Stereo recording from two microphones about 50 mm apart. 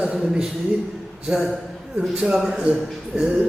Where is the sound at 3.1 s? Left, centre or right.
Centre.